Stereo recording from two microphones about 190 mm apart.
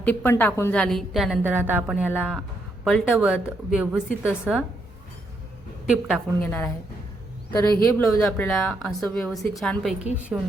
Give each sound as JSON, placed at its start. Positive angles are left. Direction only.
{"t": 0.0, "sound": "a woman's voice", "side_deg": 10}
{"t": 5.9, "sound": "a woman's voice", "side_deg": -5}
{"t": 6.4, "sound": "speech", "side_deg": 10}
{"t": 8.2, "sound": "a woman's voice", "side_deg": 5}